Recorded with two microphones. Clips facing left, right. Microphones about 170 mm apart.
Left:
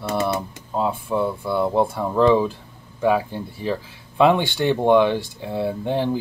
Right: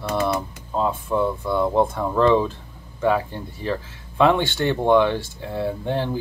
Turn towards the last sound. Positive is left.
turn(degrees=15)  # may be behind; listen again after turning